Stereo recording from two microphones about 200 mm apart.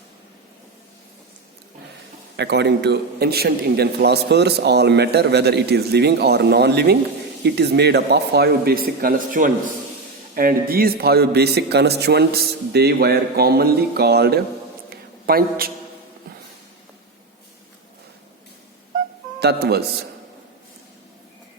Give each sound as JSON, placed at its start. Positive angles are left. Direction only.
{"t": 2.3, "sound": "a man's voice", "side_deg": -55}
{"t": 14.8, "sound": "a sound", "side_deg": -50}
{"t": 19.4, "sound": "a man's voice", "side_deg": -55}